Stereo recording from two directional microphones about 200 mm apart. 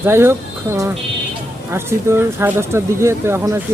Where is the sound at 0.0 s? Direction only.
10° right (ahead or behind).